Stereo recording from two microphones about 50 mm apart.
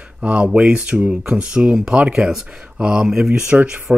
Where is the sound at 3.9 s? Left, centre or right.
Right.